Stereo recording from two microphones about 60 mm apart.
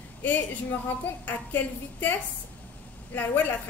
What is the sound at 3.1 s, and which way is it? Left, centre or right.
Speech, left.